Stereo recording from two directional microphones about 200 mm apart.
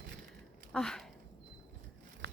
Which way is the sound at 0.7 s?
Centre (ahead or behind).